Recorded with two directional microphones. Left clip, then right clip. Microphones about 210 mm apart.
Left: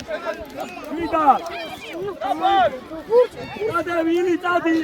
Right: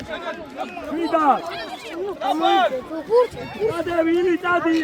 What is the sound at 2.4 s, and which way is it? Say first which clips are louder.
Speech: left 1 dB; 50° right (ahead or behind).